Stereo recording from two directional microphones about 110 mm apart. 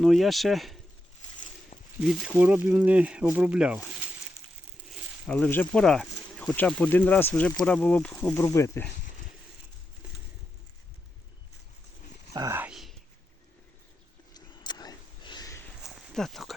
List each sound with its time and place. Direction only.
0.0 s speech: centre (ahead or behind)
2.0 s speech: centre (ahead or behind)
2.3 s speech: 15° right (ahead or behind)
5.3 s speech: 15° left (ahead or behind)
5.8 s speech: 5° left (ahead or behind)
6.3 s insect: 5° left (ahead or behind)
6.6 s speech: 10° left (ahead or behind)
8.4 s speech: 30° left (ahead or behind)
12.3 s a sound: 30° right (ahead or behind)
14.3 s a sound: 40° left (ahead or behind)
15.8 s a sound: 5° right (ahead or behind)